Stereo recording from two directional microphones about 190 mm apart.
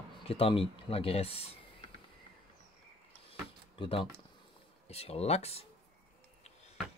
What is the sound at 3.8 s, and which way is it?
Speech, 30° left (ahead or behind).